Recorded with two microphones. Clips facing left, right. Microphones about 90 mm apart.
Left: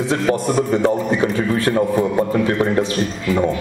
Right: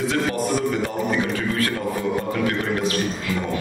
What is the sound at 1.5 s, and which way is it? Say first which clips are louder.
A man's voice: left 7 dB; 30° left (ahead or behind).